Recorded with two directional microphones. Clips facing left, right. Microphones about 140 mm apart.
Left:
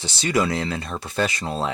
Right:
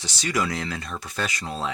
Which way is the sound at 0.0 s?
30° left (ahead or behind).